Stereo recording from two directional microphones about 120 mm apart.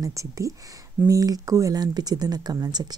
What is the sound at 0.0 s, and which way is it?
Speech, 25° right (ahead or behind).